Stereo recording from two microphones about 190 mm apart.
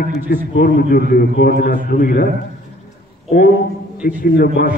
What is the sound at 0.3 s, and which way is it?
A man's voice, 50° left (ahead or behind).